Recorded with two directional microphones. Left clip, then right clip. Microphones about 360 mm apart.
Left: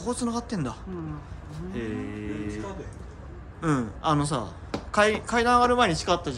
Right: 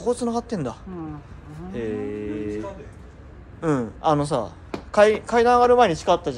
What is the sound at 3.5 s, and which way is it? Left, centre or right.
A man's voice, centre.